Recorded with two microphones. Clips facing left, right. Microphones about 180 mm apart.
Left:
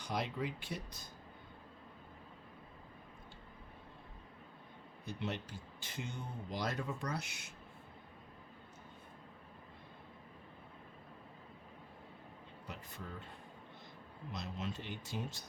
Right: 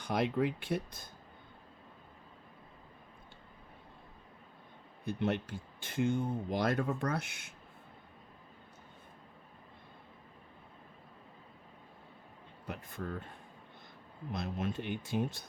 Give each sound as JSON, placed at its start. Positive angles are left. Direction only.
{"t": 0.0, "sound": "speech", "side_deg": -55}
{"t": 5.0, "sound": "speech", "side_deg": -55}
{"t": 12.6, "sound": "a sound", "side_deg": -55}
{"t": 14.3, "sound": "speech", "side_deg": -55}